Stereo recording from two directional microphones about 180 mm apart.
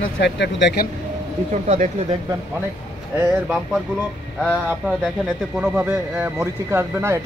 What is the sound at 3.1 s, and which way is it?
Speech, 5° right (ahead or behind).